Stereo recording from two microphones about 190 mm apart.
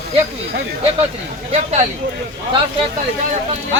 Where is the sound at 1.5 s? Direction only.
35° right (ahead or behind).